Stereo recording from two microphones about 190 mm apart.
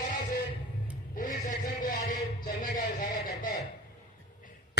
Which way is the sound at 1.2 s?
45° left (ahead or behind).